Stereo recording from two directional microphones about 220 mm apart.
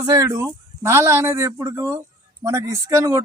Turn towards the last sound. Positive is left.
turn(degrees=-15)  # may be behind; listen again after turning